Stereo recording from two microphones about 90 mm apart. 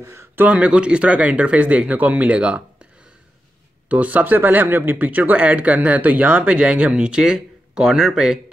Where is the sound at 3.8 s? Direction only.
15° right (ahead or behind).